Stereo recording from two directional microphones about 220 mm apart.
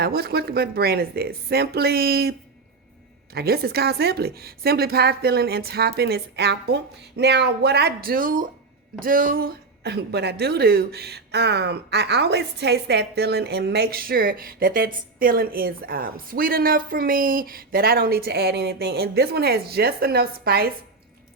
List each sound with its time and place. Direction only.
0.0 s a woman's voice: 45° right (ahead or behind)
3.3 s a woman's voice: 45° right (ahead or behind)